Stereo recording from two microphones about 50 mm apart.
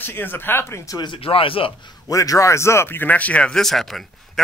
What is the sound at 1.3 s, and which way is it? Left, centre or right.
Speech, left.